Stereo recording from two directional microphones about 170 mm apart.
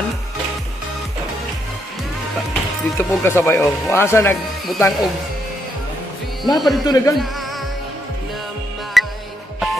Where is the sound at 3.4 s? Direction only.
10° left (ahead or behind).